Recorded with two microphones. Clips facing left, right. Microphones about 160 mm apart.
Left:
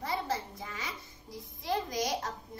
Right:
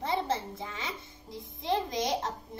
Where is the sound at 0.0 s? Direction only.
25° right (ahead or behind).